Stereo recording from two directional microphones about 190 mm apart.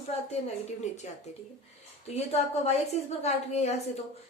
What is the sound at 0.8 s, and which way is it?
Speech, 35° left (ahead or behind).